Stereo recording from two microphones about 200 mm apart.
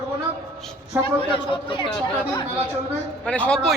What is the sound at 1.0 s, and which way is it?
Speech, 25° left (ahead or behind).